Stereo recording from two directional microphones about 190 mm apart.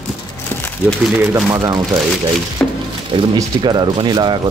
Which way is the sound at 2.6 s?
10° left (ahead or behind).